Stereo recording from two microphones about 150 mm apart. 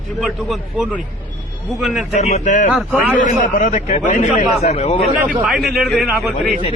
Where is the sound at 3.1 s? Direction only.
65° left (ahead or behind).